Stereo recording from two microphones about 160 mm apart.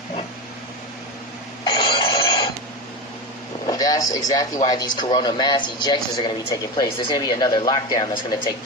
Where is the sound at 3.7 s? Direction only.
20° left (ahead or behind).